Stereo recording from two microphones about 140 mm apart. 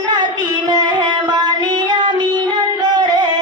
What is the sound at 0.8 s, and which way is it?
Music, 30° right (ahead or behind).